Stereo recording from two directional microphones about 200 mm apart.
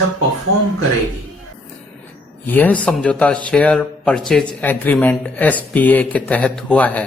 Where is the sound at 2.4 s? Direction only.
10° left (ahead or behind).